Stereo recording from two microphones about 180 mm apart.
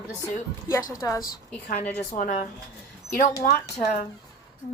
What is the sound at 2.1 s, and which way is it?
Speech, 50° left (ahead or behind).